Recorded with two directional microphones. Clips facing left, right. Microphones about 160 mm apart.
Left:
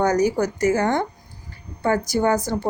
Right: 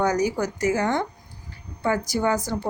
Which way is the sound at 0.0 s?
50° left (ahead or behind).